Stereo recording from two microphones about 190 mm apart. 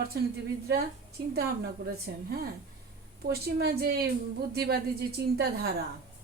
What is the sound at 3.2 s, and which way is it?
A woman's voice, 55° right (ahead or behind).